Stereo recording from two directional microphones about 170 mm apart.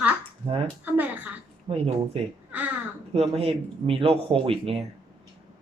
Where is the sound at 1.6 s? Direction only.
35° right (ahead or behind).